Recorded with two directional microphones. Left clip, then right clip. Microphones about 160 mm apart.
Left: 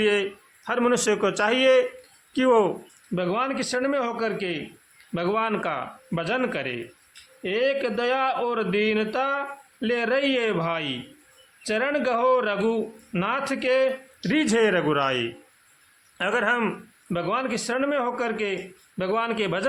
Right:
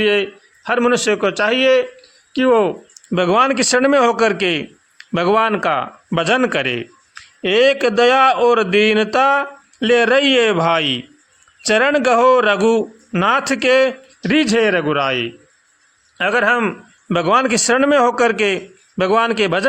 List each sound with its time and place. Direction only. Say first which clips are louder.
0.0 s a man's voice: right 7 dB; 20° right (ahead or behind)
3.2 s a man's voice: right 12 dB; 50° right (ahead or behind); by 16.7 s 30° right (ahead or behind)
17.1 s a man's voice: right 11 dB; 50° right (ahead or behind)